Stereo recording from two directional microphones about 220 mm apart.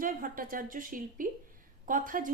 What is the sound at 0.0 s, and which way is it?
Speech, 40° right (ahead or behind).